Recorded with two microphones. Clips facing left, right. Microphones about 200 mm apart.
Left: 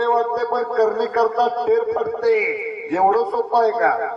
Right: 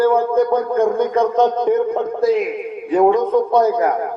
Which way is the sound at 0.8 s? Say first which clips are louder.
Left 1 dB; 70° left (ahead or behind).